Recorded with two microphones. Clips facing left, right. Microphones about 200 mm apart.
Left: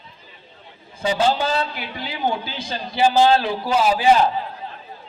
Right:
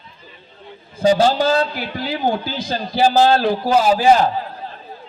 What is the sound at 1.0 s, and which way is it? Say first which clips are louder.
Speech: right 5 dB; 40° right (ahead or behind).